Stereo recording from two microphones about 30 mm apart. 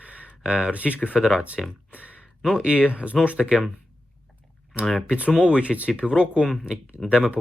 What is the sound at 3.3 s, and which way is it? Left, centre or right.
Speech, right.